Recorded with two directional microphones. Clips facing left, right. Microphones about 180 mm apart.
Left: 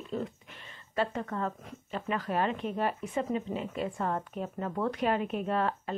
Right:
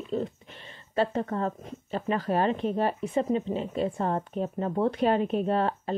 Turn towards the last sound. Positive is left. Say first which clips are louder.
# right 4 dB
turn(degrees=-30)  # may be behind; listen again after turning